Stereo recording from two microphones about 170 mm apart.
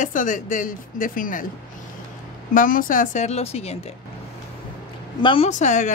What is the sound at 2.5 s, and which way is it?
A woman's voice, 55° left (ahead or behind).